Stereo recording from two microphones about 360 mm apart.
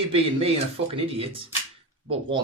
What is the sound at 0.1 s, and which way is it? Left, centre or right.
Speech, centre.